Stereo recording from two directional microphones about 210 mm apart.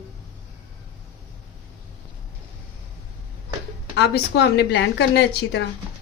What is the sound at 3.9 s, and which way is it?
A woman's voice, 55° left (ahead or behind).